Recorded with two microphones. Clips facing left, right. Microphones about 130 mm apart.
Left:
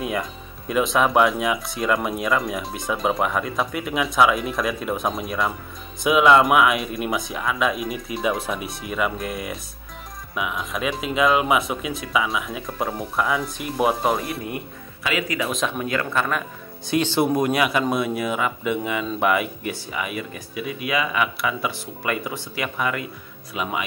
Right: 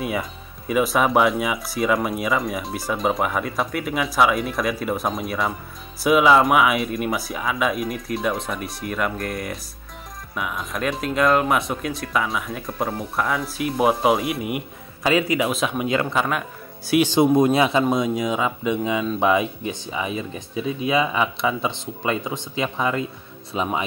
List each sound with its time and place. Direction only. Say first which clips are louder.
0.0 s speech: even; 5° right (ahead or behind)
15.0 s speech: right 6 dB; 30° right (ahead or behind)
15.5 s speech: right 1 dB; 5° right (ahead or behind)
15.8 s speech: right 3 dB; 20° right (ahead or behind)
16.2 s speech: right 1 dB; 5° right (ahead or behind); by 23.8 s 30° right (ahead or behind)